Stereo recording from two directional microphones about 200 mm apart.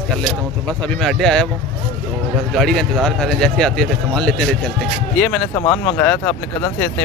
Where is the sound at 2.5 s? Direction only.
Centre (ahead or behind).